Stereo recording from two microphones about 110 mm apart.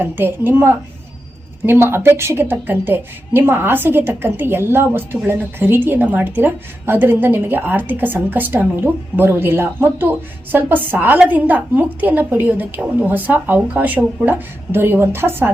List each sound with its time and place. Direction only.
0.0 s a woman's voice: 20° right (ahead or behind)